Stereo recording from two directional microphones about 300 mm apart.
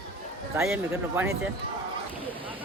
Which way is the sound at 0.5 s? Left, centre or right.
Centre.